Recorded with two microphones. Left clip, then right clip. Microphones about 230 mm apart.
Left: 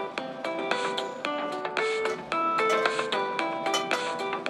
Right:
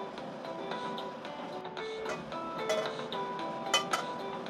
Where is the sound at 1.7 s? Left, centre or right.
Left.